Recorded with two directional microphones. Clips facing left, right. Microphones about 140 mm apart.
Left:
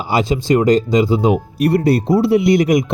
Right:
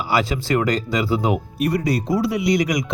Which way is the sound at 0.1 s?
25° left (ahead or behind).